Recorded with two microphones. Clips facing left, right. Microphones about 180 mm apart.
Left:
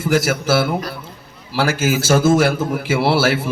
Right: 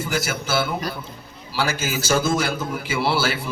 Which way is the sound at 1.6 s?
55° left (ahead or behind).